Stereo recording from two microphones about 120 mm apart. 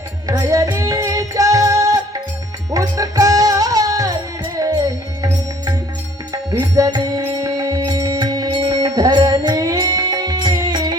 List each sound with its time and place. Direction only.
0.3 s music: 25° right (ahead or behind)